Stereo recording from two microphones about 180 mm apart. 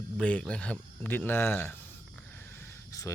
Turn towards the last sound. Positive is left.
turn(degrees=20)  # may be behind; listen again after turning